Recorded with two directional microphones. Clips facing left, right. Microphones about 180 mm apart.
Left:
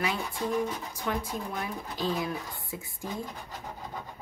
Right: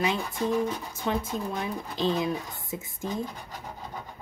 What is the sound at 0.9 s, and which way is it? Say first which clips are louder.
Speech: right 3 dB; 25° right (ahead or behind).